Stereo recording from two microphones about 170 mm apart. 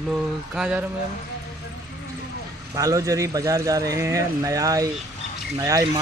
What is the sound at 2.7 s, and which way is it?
Speech, 20° right (ahead or behind).